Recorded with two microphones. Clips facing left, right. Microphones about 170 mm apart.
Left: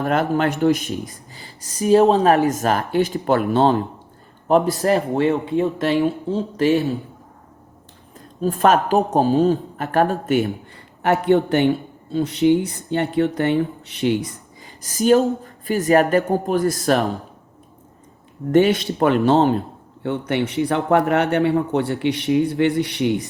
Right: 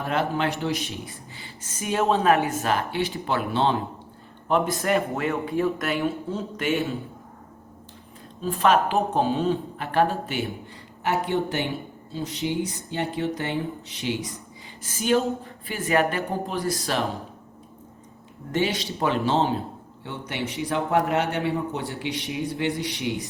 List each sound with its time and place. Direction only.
0.0 s speech: 50° left (ahead or behind); by 5.3 s 30° left (ahead or behind)
5.3 s speech: 20° left (ahead or behind)
8.4 s speech: 45° left (ahead or behind)
11.0 s a man's voice: 60° left (ahead or behind)
14.8 s speech: 40° left (ahead or behind)
18.5 s a man's voice: 55° left (ahead or behind)